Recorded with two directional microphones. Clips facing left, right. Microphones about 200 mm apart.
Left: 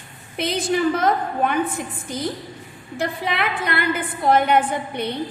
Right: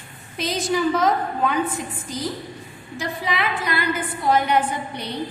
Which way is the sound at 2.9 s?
60° left (ahead or behind).